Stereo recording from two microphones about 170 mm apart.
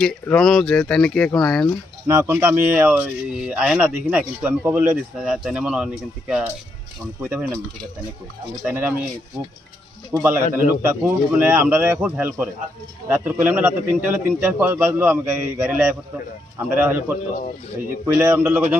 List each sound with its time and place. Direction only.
0.0 s speech: 5° left (ahead or behind)
2.0 s speech: 15° right (ahead or behind)
8.6 s speech: 10° right (ahead or behind)
10.1 s speech: 15° right (ahead or behind)
18.0 s speech: 15° right (ahead or behind)